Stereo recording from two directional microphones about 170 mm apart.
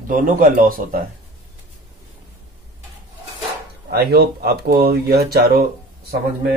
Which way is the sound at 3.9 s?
70° right (ahead or behind).